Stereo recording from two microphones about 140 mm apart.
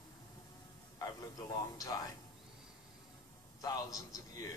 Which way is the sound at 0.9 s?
25° left (ahead or behind).